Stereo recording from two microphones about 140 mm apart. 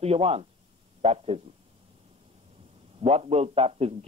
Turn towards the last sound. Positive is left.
turn(degrees=-45)  # may be behind; listen again after turning